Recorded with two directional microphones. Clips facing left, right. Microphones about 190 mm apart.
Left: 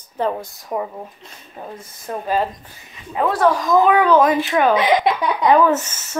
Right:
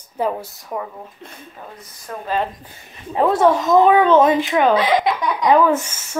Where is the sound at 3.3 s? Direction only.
25° right (ahead or behind).